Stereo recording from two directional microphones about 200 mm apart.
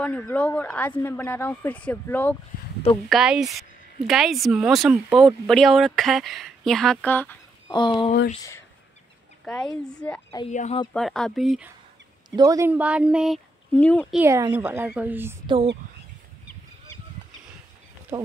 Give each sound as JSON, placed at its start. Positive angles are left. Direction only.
{"t": 0.0, "sound": "speech", "side_deg": 5}
{"t": 3.1, "sound": "speech", "side_deg": -5}
{"t": 7.7, "sound": "speech", "side_deg": 25}
{"t": 9.4, "sound": "speech", "side_deg": 5}
{"t": 10.5, "sound": "speech", "side_deg": 35}
{"t": 10.9, "sound": "speech", "side_deg": 0}
{"t": 12.4, "sound": "speech", "side_deg": -15}
{"t": 14.1, "sound": "a woman's voice", "side_deg": -15}
{"t": 18.1, "sound": "speech", "side_deg": -20}